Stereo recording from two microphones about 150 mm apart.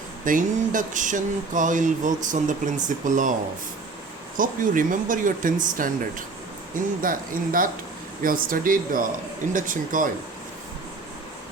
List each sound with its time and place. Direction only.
0.3 s speech: 60° right (ahead or behind)
4.4 s speech: 65° right (ahead or behind)